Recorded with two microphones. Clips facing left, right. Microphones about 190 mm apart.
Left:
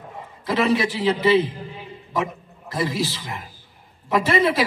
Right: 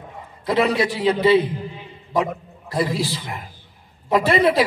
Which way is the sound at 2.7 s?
25° right (ahead or behind).